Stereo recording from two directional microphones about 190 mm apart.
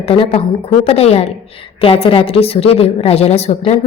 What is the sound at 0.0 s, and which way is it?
A woman's voice, 30° left (ahead or behind).